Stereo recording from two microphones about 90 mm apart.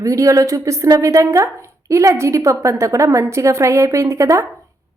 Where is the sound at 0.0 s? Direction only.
35° right (ahead or behind).